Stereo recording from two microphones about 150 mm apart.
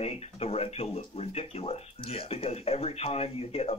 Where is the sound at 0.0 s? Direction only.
45° left (ahead or behind).